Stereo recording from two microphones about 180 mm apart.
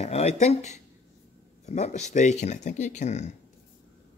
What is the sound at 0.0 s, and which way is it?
Speech, 35° left (ahead or behind).